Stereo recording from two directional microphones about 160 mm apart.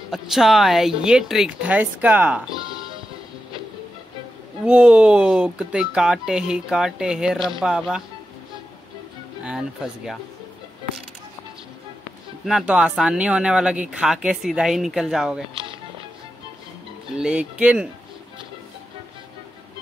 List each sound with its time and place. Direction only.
0.1 s speech: centre (ahead or behind)
4.6 s speech: 5° right (ahead or behind)
9.4 s speech: 5° right (ahead or behind)
12.4 s speech: 5° right (ahead or behind)
17.1 s speech: 5° right (ahead or behind)